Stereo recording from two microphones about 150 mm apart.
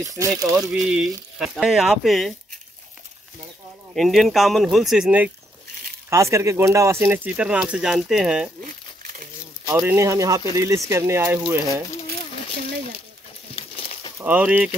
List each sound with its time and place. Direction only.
0.0 s speech: 20° right (ahead or behind)
0.6 s speech: 5° right (ahead or behind)
3.9 s speech: centre (ahead or behind)
6.0 s speech: 20° right (ahead or behind); by 8.5 s 5° right (ahead or behind)
9.7 s speech: 15° right (ahead or behind)
13.7 s crumpling: 40° left (ahead or behind)
14.1 s speech: 10° right (ahead or behind)